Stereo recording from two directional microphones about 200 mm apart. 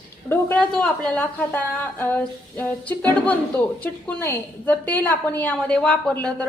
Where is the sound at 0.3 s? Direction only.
10° left (ahead or behind).